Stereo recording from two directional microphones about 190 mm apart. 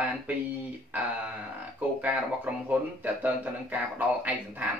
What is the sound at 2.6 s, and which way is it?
Speech, 10° right (ahead or behind).